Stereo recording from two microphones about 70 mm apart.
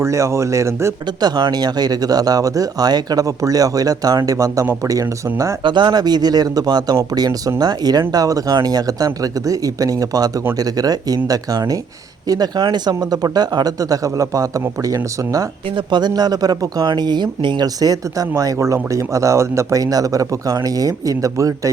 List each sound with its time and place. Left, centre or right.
0.0 s speech: right
1.2 s speech: right
5.7 s speech: right
12.3 s speech: right
15.9 s speech: right